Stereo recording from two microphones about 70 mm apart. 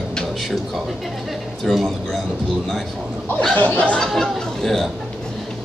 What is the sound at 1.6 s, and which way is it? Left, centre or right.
Speech, centre.